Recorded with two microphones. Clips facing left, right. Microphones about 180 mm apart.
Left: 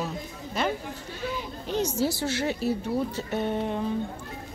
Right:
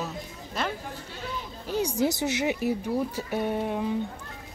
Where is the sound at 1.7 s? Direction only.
10° right (ahead or behind).